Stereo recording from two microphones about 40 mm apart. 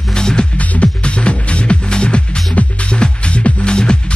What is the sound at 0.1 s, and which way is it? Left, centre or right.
Music, centre.